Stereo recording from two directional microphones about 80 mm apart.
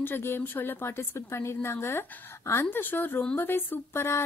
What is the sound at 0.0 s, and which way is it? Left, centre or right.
A woman's voice, left.